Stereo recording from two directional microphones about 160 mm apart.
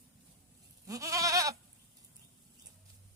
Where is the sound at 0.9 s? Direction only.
20° right (ahead or behind).